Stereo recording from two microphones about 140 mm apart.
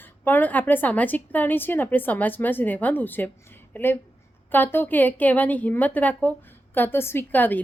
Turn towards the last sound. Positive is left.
turn(degrees=15)  # may be behind; listen again after turning